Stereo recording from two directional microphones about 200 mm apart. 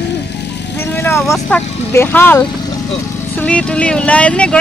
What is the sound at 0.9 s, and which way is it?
Speech, 10° left (ahead or behind).